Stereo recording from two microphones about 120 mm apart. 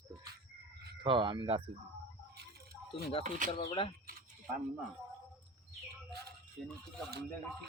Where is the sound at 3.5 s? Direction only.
50° left (ahead or behind).